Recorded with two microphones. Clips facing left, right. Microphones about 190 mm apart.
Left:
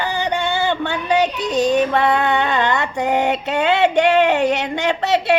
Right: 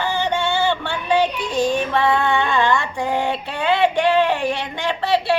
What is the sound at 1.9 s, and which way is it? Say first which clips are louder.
Music: left 1 dB; 45° left (ahead or behind).